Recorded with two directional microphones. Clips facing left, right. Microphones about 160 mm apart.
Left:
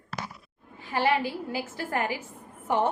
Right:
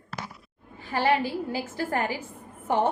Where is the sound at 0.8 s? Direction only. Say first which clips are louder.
Right 1 dB; 35° right (ahead or behind).